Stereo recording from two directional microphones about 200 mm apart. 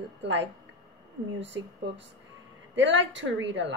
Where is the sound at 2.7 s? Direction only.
65° right (ahead or behind).